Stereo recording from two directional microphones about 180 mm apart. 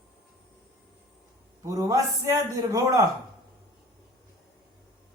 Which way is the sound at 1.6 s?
20° right (ahead or behind).